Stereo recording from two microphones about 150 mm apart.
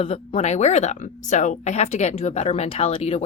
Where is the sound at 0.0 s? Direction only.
40° left (ahead or behind).